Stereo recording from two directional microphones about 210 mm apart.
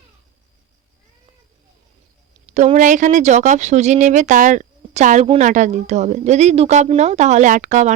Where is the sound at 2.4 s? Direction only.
30° right (ahead or behind).